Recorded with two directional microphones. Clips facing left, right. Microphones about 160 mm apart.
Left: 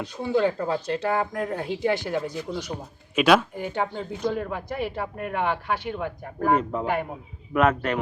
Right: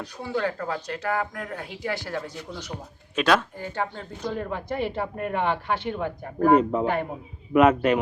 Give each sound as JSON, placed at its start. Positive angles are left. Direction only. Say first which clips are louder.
{"t": 0.0, "sound": "speech", "louder": "left 5 dB", "side_deg": 20}
{"t": 4.3, "sound": "speech", "louder": "right 1 dB", "side_deg": 5}
{"t": 6.8, "sound": "speech", "louder": "right 1 dB", "side_deg": 10}
{"t": 7.5, "sound": "speech", "louder": "right 4 dB", "side_deg": -10}